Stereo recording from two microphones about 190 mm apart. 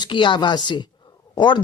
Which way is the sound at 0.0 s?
25° left (ahead or behind).